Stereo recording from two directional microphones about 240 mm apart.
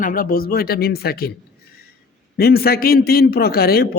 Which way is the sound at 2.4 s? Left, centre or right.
Left.